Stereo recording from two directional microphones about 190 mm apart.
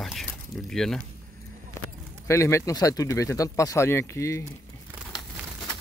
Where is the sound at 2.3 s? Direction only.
15° left (ahead or behind).